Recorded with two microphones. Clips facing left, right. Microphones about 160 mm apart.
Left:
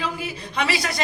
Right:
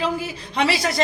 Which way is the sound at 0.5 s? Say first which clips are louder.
Right 4 dB; 35° right (ahead or behind).